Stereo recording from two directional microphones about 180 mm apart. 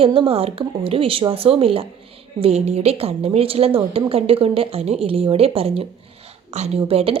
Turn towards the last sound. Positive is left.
turn(degrees=-35)  # may be behind; listen again after turning